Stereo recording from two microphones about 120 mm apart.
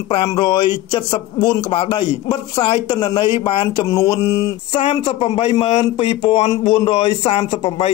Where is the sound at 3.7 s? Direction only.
30° left (ahead or behind).